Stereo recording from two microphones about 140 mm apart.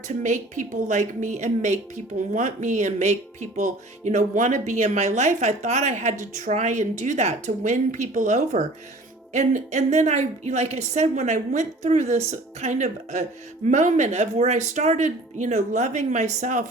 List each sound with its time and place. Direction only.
0.2 s speech: 65° right (ahead or behind)